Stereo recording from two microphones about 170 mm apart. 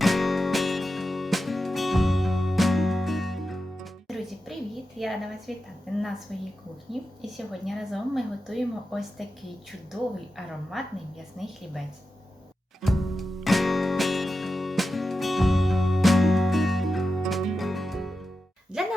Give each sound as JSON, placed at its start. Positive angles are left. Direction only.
{"t": 0.0, "sound": "music", "side_deg": 0}
{"t": 4.9, "sound": "a woman's voice", "side_deg": 0}
{"t": 10.3, "sound": "a woman's voice", "side_deg": 0}
{"t": 12.8, "sound": "music", "side_deg": 0}